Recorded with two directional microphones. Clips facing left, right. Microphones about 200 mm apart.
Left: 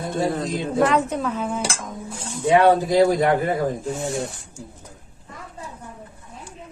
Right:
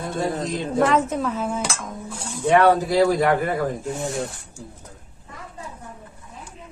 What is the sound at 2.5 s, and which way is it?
Speech, 15° left (ahead or behind).